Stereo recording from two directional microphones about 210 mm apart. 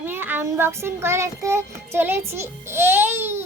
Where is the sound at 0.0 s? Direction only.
10° right (ahead or behind).